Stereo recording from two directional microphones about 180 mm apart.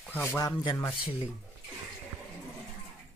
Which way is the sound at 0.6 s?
30° left (ahead or behind).